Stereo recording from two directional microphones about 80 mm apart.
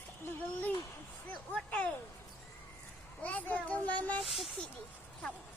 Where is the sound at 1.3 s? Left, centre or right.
Centre.